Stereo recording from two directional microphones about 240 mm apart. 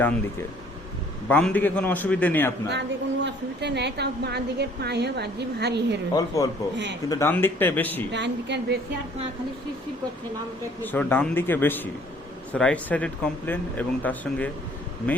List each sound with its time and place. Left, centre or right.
1.3 s a man's voice: centre
2.7 s a woman's voice: right
6.1 s a man's voice: centre
8.1 s a woman's voice: right
10.9 s a man's voice: centre